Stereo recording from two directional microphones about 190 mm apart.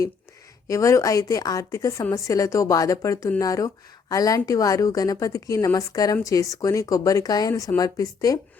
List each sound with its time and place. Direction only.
0.7 s a woman's voice: 15° left (ahead or behind)